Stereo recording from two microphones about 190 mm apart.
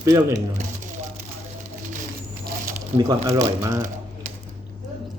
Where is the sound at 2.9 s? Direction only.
20° right (ahead or behind).